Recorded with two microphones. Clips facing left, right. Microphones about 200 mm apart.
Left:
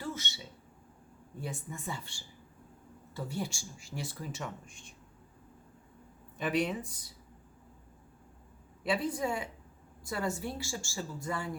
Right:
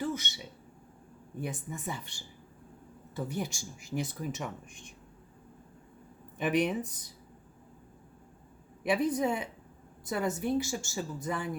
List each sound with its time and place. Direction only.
0.0 s a sound: 15° right (ahead or behind)
1.4 s speech: 15° right (ahead or behind)
6.3 s speech: 20° right (ahead or behind)
8.8 s speech: 20° right (ahead or behind)